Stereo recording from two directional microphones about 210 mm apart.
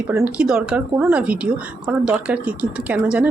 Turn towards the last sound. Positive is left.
turn(degrees=-5)  # may be behind; listen again after turning